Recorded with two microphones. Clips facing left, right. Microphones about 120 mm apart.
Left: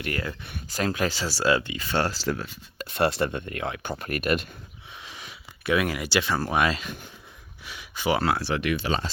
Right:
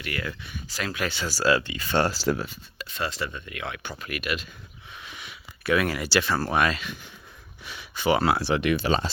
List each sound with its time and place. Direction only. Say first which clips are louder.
0.0 s speech: left 2 dB; 40° left (ahead or behind)
0.4 s speech: even; 55° left (ahead or behind)
0.8 s speech: left 4 dB; 35° left (ahead or behind); by 1.9 s 15° left (ahead or behind)
1.9 s speech: right 3 dB; 5° right (ahead or behind)
2.7 s speech: left 8 dB; 60° left (ahead or behind)
3.6 s speech: even; 35° left (ahead or behind)
4.9 s a sound: right 1 dB; 25° left (ahead or behind)
5.6 s speech: right 1 dB; 15° left (ahead or behind)
7.6 s a sound: right 2 dB; 5° left (ahead or behind)
8.2 s speech: right 2 dB; 10° right (ahead or behind)
8.7 s speech: right 3 dB; 35° right (ahead or behind)